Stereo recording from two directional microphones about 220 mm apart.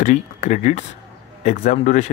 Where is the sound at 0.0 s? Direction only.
35° left (ahead or behind).